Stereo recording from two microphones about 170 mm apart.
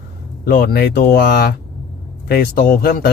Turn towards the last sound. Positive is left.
turn(degrees=65)  # may be behind; listen again after turning